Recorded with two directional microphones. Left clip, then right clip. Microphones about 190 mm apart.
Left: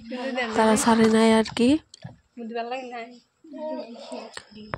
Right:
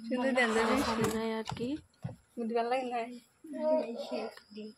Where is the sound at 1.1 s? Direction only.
60° left (ahead or behind).